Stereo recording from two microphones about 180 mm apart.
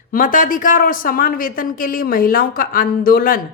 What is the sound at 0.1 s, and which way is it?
A woman's voice, 50° left (ahead or behind).